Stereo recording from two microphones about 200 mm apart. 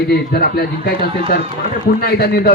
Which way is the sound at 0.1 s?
50° left (ahead or behind).